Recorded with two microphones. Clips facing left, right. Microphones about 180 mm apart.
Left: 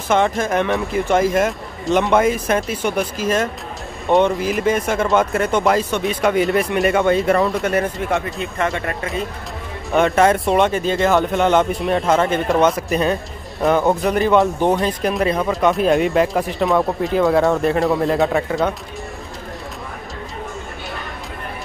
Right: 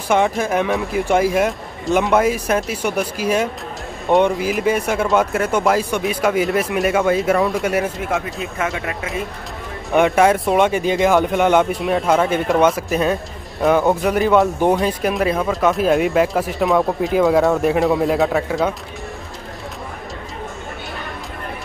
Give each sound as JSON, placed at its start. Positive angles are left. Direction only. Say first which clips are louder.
{"t": 0.1, "sound": "speech", "louder": "even", "side_deg": -10}
{"t": 10.7, "sound": "speech", "louder": "right 1 dB", "side_deg": -15}